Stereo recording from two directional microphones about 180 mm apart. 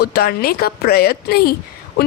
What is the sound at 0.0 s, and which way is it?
Speech, 60° left (ahead or behind).